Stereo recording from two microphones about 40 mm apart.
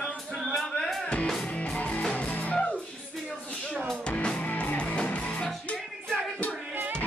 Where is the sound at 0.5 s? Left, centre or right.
Centre.